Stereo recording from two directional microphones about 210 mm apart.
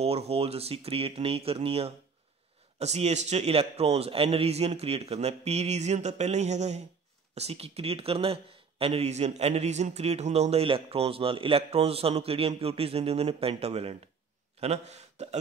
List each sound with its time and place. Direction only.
0.0 s a man's voice: 30° right (ahead or behind)